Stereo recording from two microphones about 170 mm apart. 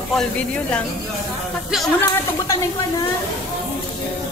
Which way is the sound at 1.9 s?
20° left (ahead or behind).